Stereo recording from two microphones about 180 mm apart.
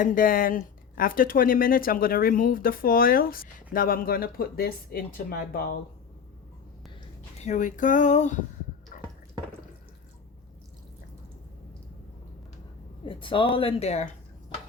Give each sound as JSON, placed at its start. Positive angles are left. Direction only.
{"t": 0.0, "sound": "speech", "side_deg": 50}
{"t": 7.3, "sound": "speech", "side_deg": 40}
{"t": 13.1, "sound": "speech", "side_deg": 30}